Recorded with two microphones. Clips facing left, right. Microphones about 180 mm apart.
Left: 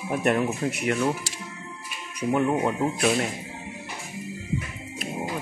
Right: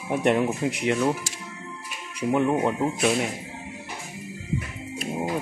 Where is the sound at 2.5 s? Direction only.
Centre (ahead or behind).